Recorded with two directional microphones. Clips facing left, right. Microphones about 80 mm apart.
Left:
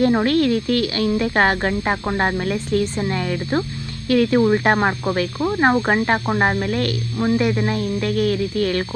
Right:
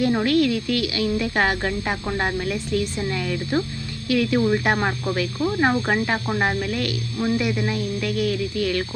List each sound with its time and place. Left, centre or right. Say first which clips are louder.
0.0 s speech: left 3 dB; left